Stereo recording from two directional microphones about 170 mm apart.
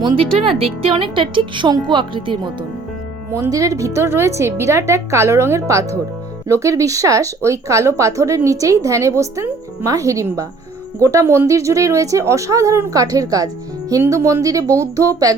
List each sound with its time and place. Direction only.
0.4 s a woman's voice: 35° right (ahead or behind)